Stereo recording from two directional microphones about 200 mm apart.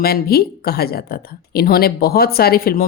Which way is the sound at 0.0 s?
50° left (ahead or behind).